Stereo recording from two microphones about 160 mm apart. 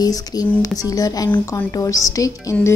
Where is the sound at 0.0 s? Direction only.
25° left (ahead or behind).